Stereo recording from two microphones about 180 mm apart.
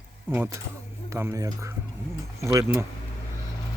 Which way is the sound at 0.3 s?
15° right (ahead or behind).